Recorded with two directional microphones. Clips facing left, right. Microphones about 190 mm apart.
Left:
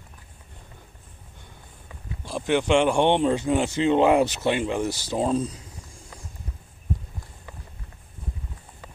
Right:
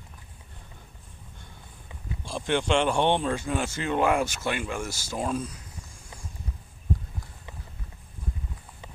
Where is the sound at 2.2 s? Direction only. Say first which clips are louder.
Left 4 dB; 10° left (ahead or behind); by 5.5 s 25° left (ahead or behind).